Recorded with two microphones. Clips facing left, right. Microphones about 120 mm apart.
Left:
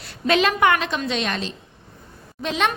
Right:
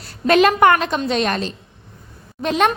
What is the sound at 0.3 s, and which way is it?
A woman's voice, 50° right (ahead or behind).